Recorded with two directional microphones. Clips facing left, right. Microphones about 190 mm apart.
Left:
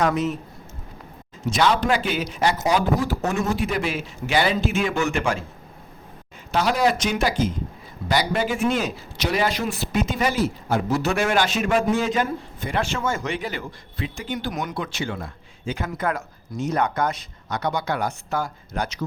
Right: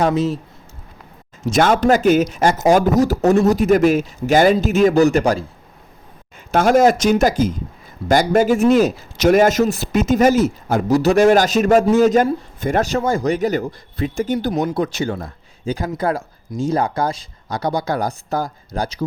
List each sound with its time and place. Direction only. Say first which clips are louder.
0.0 s speech: right 4 dB; 30° right (ahead or behind)
1.5 s a man's voice: right 6 dB; 50° right (ahead or behind)
6.5 s a man's voice: right 8 dB; 50° right (ahead or behind); by 19.0 s 35° right (ahead or behind)